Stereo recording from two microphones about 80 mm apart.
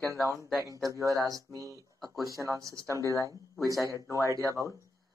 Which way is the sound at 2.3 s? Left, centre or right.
Right.